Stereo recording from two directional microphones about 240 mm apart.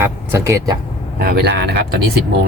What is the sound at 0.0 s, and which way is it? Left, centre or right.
Speech, centre.